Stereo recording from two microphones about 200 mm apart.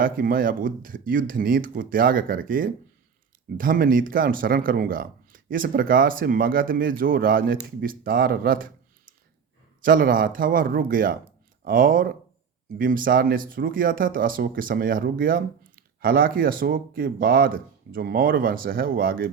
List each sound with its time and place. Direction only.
0.0 s speech: 45° right (ahead or behind)